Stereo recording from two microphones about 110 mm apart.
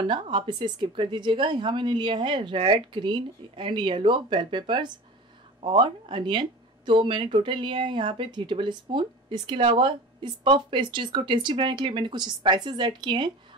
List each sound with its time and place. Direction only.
0.0 s speech: 50° right (ahead or behind)